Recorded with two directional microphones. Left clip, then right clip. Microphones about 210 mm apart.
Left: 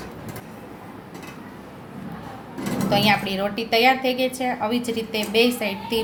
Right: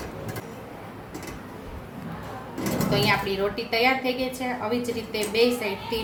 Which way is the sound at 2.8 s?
45° left (ahead or behind).